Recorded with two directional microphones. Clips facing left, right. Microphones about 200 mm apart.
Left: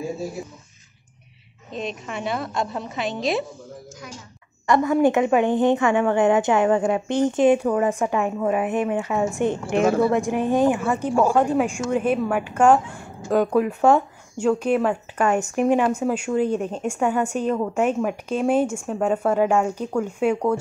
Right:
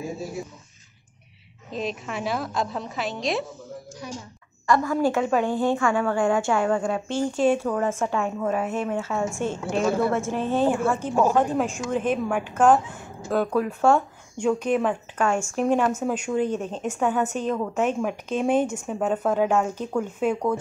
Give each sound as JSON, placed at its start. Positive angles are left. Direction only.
{"t": 1.7, "sound": "a woman's voice", "side_deg": 0}
{"t": 4.6, "sound": "a woman's voice", "side_deg": 20}
{"t": 9.7, "sound": "a woman's voice", "side_deg": 55}
{"t": 10.1, "sound": "a woman's voice", "side_deg": 15}